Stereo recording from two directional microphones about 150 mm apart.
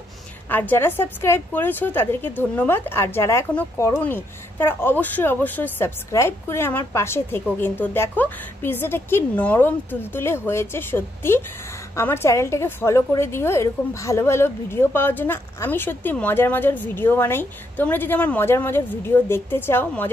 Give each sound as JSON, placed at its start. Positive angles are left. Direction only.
{"t": 0.5, "sound": "a woman's voice", "side_deg": 10}